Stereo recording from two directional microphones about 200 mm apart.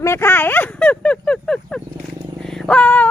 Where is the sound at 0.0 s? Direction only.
10° left (ahead or behind).